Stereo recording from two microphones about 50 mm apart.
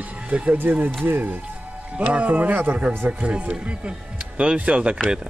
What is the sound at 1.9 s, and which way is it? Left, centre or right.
Speech, right.